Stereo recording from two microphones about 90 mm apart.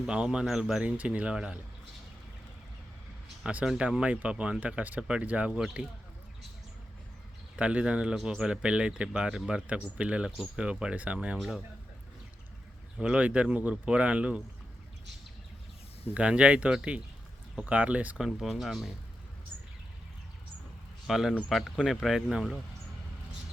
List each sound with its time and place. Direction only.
0.0 s speech: 10° right (ahead or behind)
3.4 s speech: 10° right (ahead or behind)
7.5 s speech: 15° right (ahead or behind)
11.3 s speech: centre (ahead or behind)
13.0 s speech: 15° right (ahead or behind)
16.1 s speech: 15° right (ahead or behind)
18.2 s speech: 5° right (ahead or behind)
21.1 s speech: 5° right (ahead or behind)